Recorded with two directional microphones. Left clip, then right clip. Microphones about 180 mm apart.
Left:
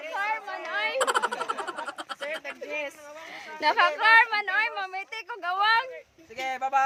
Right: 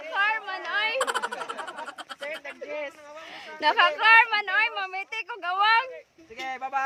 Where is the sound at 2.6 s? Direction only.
60° left (ahead or behind).